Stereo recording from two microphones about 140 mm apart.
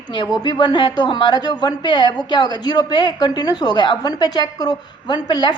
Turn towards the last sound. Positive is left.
turn(degrees=30)  # may be behind; listen again after turning